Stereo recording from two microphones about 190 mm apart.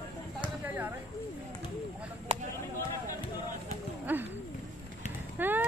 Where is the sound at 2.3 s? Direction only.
30° right (ahead or behind).